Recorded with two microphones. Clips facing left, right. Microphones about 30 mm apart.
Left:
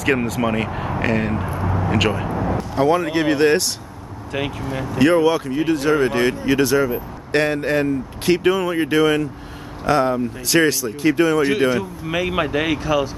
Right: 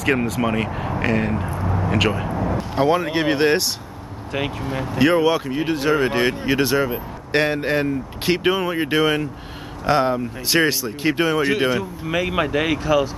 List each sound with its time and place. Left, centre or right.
0.0 s speech: centre
2.3 s vehicle: centre
2.7 s speech: centre
4.9 s speech: centre
11.4 s speech: centre